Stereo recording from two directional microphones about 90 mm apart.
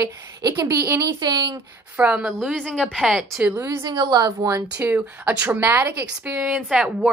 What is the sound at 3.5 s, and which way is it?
Speech, 30° right (ahead or behind).